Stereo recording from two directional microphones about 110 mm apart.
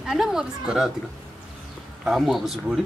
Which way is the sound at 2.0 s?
Centre (ahead or behind).